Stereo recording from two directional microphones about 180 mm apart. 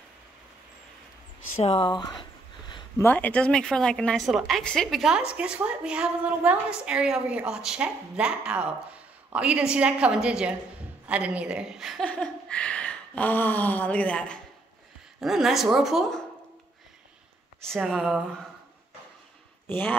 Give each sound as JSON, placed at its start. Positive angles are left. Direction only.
{"t": 1.6, "sound": "speech", "side_deg": 30}
{"t": 3.0, "sound": "a woman's voice", "side_deg": 10}
{"t": 17.6, "sound": "a woman's voice", "side_deg": 0}
{"t": 19.7, "sound": "speech", "side_deg": 10}